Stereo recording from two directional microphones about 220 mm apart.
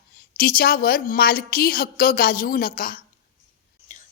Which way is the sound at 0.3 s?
40° left (ahead or behind).